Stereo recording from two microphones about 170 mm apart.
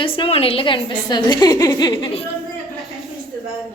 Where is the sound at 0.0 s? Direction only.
30° left (ahead or behind).